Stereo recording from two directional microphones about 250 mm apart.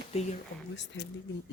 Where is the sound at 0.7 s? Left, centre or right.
Left.